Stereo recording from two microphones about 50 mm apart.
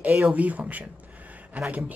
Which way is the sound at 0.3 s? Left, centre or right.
Right.